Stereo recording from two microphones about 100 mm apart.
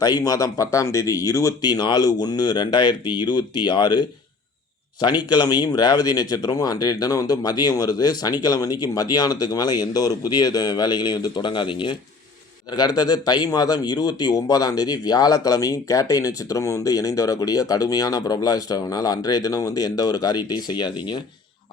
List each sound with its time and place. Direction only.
0.0 s speech: 40° left (ahead or behind)
1.6 s speech: 45° left (ahead or behind)
12.7 s speech: 40° left (ahead or behind)